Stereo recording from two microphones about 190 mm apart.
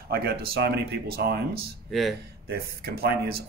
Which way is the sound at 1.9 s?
Centre (ahead or behind).